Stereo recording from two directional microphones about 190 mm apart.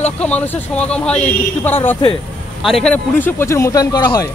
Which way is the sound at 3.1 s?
10° left (ahead or behind).